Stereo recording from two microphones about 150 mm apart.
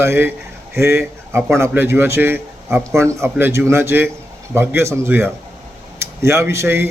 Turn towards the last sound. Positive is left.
turn(degrees=-15)  # may be behind; listen again after turning